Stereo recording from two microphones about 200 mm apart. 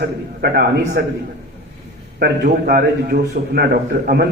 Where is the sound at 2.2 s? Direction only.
50° right (ahead or behind).